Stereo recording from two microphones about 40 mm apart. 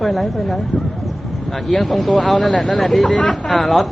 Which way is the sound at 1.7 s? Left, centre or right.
Centre.